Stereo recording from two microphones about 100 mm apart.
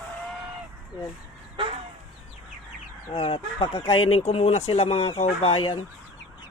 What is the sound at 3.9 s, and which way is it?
Speech, 70° left (ahead or behind).